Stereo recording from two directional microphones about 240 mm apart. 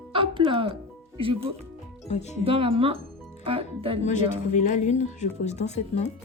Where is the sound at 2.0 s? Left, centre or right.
Left.